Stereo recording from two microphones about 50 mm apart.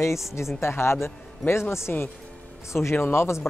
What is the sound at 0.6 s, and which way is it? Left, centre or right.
Speech, left.